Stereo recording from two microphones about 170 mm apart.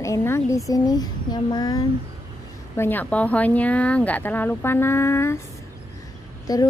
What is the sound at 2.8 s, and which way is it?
A woman's voice, 10° left (ahead or behind).